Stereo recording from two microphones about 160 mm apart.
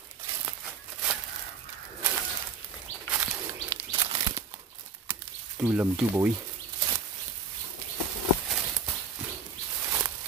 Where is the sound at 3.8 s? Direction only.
30° right (ahead or behind).